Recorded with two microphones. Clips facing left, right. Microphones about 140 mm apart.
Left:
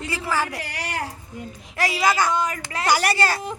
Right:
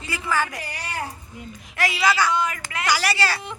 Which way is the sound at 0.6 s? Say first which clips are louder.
Left 2 dB; 85° left.